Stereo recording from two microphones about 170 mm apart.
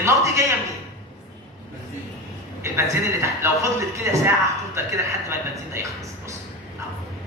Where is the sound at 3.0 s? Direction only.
15° right (ahead or behind).